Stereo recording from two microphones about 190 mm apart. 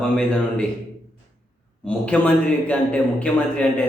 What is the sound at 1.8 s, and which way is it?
A man's voice, 5° left (ahead or behind).